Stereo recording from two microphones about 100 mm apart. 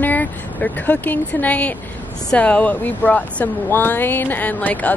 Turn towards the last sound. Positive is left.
turn(degrees=15)  # may be behind; listen again after turning